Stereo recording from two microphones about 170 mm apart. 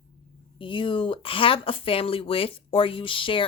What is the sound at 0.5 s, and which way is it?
Speech, 30° left (ahead or behind).